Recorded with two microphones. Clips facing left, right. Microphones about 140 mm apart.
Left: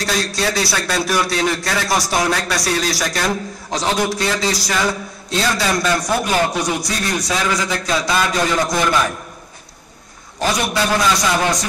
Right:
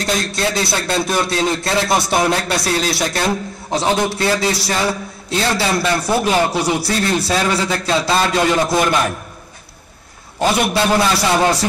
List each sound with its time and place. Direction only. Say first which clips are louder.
0.0 s a man's voice: right 1 dB; 25° right (ahead or behind)
10.4 s a man's voice: right 3 dB; 25° right (ahead or behind)